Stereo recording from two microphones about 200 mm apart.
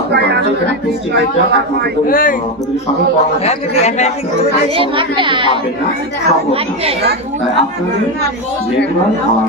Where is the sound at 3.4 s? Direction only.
30° left (ahead or behind).